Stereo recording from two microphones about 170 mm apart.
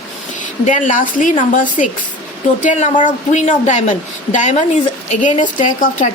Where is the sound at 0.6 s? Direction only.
50° left (ahead or behind).